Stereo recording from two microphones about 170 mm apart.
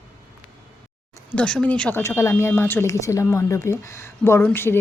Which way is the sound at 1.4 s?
5° left (ahead or behind).